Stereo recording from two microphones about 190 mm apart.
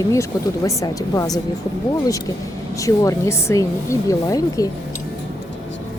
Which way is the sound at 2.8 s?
15° left (ahead or behind).